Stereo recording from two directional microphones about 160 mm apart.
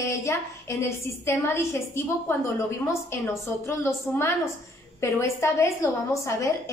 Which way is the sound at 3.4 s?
15° left (ahead or behind).